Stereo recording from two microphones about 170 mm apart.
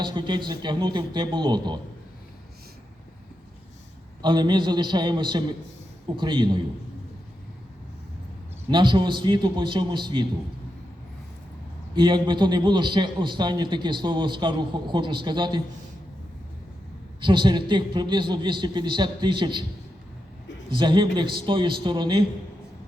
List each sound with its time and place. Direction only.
0.0 s a man's voice: 30° right (ahead or behind)
4.2 s a man's voice: 25° right (ahead or behind)
8.7 s a man's voice: 25° right (ahead or behind)
11.9 s a man's voice: 25° right (ahead or behind)
17.2 s a man's voice: 25° right (ahead or behind)
20.7 s a man's voice: 25° right (ahead or behind)